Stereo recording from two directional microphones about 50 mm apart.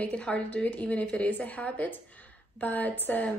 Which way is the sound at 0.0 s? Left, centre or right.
Left.